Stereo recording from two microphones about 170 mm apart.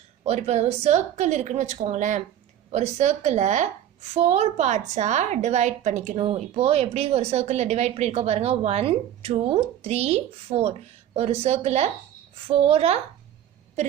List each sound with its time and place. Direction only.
0.3 s speech: 40° right (ahead or behind)